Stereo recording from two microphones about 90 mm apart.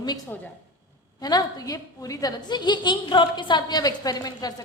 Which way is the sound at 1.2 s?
45° left (ahead or behind).